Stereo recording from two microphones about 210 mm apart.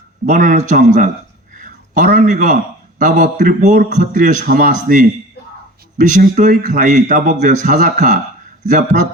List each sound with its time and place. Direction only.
0.3 s a man's voice: 35° right (ahead or behind)